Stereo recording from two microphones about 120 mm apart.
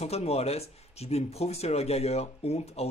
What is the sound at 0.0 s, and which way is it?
Speech, 60° left (ahead or behind).